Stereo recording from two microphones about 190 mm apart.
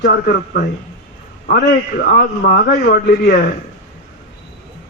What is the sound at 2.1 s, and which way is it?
Speech, 55° left (ahead or behind).